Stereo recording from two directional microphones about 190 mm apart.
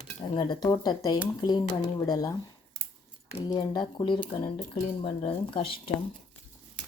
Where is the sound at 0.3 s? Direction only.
25° left (ahead or behind).